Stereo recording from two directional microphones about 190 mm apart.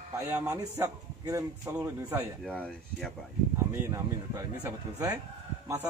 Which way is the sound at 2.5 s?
5° left (ahead or behind).